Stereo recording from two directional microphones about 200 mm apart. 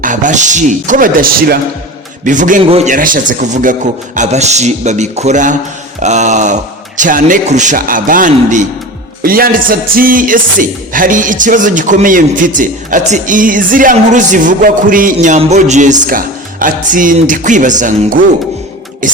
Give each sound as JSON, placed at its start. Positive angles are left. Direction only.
{"t": 0.0, "sound": "speech", "side_deg": -40}